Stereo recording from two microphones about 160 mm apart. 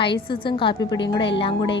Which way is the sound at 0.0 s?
30° left (ahead or behind).